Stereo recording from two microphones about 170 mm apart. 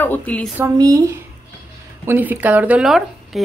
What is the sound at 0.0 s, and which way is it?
Speech, 10° left (ahead or behind).